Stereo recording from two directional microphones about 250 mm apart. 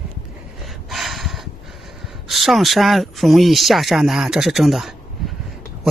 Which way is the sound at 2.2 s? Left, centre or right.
Centre.